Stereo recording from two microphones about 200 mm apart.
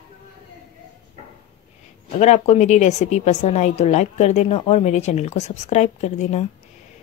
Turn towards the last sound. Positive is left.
turn(degrees=35)  # may be behind; listen again after turning